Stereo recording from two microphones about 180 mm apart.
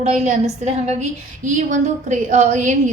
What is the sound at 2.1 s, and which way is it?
Speech, 45° right (ahead or behind).